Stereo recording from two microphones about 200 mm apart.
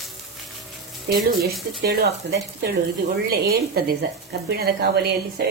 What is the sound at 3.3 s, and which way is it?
A woman's voice, 50° right (ahead or behind).